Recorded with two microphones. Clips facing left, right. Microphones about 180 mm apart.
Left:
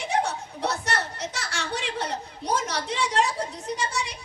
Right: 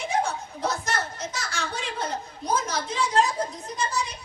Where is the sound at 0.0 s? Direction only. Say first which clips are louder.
Even; 70° left (ahead or behind).